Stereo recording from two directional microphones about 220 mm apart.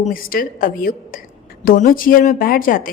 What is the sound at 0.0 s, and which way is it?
Speech, 40° left (ahead or behind).